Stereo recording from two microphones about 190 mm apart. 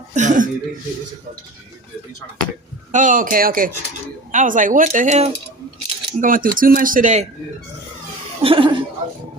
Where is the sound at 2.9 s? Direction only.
40° right (ahead or behind).